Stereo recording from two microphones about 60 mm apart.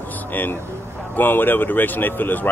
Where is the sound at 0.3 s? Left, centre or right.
Left.